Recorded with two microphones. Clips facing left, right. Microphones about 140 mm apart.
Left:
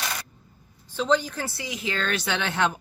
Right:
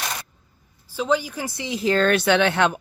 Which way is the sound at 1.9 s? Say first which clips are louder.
Right 10 dB; 45° right (ahead or behind).